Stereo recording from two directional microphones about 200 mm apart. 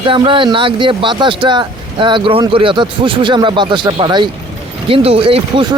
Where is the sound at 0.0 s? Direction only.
25° right (ahead or behind).